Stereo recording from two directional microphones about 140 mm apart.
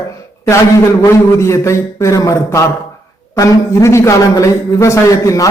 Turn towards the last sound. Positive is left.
turn(degrees=20)  # may be behind; listen again after turning